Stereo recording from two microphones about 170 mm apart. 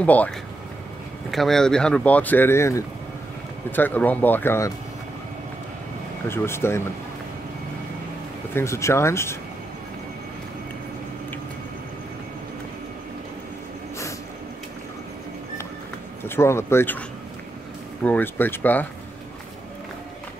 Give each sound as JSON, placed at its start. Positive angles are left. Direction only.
{"t": 0.0, "sound": "speech", "side_deg": 10}
{"t": 1.3, "sound": "speech", "side_deg": 0}
{"t": 6.2, "sound": "speech", "side_deg": 15}
{"t": 8.5, "sound": "speech", "side_deg": 15}
{"t": 16.3, "sound": "speech", "side_deg": 15}
{"t": 18.0, "sound": "speech", "side_deg": 10}